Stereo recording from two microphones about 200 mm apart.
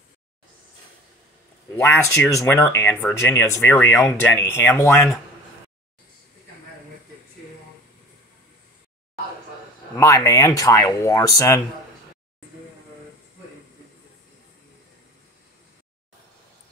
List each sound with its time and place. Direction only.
1.8 s speech: 15° left (ahead or behind)
9.9 s speech: 15° left (ahead or behind)